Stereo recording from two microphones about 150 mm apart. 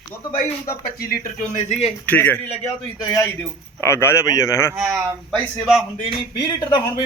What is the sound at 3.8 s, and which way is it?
Speech, 15° left (ahead or behind).